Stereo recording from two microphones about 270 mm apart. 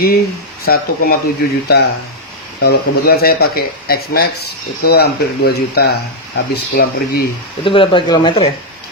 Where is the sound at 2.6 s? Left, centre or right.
Left.